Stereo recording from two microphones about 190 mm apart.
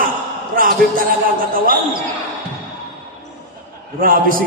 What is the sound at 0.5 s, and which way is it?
Speech, 50° right (ahead or behind).